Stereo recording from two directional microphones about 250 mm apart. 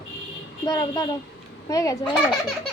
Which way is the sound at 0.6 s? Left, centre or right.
Centre.